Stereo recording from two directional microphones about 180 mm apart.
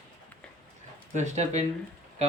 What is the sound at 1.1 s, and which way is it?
Speech, 40° right (ahead or behind).